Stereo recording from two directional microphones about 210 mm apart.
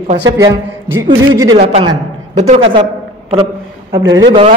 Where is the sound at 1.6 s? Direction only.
30° right (ahead or behind).